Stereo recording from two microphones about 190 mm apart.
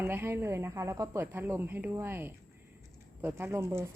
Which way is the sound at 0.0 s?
10° right (ahead or behind).